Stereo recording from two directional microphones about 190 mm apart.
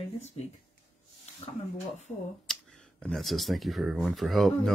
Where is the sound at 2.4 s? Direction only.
5° left (ahead or behind).